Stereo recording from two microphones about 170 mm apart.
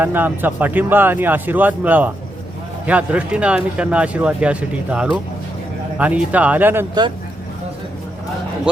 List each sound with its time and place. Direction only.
0.0 s speech: 10° right (ahead or behind)
8.7 s speech: 5° right (ahead or behind)